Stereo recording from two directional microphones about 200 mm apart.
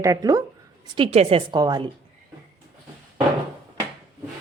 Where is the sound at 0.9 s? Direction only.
30° right (ahead or behind).